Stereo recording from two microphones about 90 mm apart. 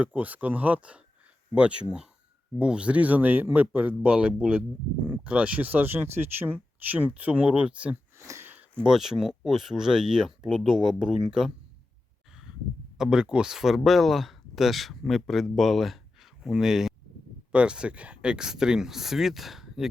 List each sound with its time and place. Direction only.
0.0 s speech: 15° right (ahead or behind)
8.2 s a sound: 30° right (ahead or behind)
8.8 s speech: 5° right (ahead or behind)
13.0 s speech: 10° right (ahead or behind)